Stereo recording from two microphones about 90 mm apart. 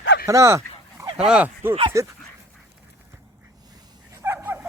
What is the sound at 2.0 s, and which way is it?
Speech, 35° right (ahead or behind).